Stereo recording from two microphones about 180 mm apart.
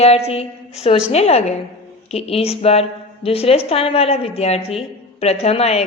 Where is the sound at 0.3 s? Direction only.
35° left (ahead or behind).